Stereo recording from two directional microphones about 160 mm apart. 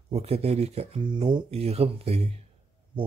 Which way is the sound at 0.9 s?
30° right (ahead or behind).